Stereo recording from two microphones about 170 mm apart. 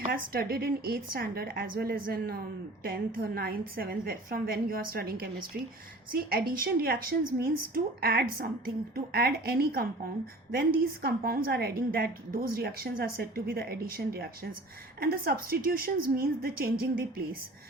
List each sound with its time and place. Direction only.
0.0 s a woman's voice: 60° right (ahead or behind)